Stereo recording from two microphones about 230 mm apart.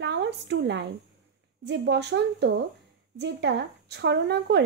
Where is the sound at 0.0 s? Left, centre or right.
Right.